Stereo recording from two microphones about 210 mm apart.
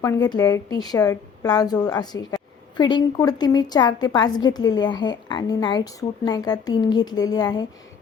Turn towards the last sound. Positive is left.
turn(degrees=20)  # may be behind; listen again after turning